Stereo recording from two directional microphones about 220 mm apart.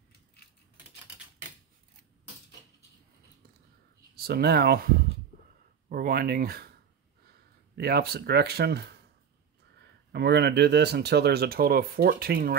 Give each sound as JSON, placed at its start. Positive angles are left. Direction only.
{"t": 4.1, "sound": "speech", "side_deg": -45}
{"t": 7.7, "sound": "speech", "side_deg": -45}